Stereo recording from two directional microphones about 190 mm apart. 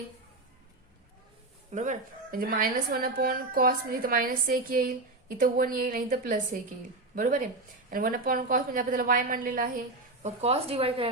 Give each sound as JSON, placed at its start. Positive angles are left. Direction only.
{"t": 1.7, "sound": "a woman's voice", "side_deg": -40}
{"t": 10.2, "sound": "speech", "side_deg": -35}